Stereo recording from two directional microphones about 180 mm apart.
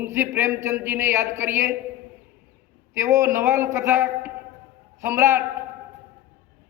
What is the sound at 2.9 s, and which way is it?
A man's voice, 15° right (ahead or behind).